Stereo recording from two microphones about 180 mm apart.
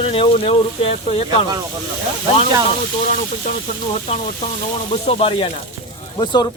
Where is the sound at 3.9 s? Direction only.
40° left (ahead or behind).